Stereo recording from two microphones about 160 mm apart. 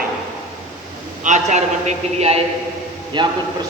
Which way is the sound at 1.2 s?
50° right (ahead or behind).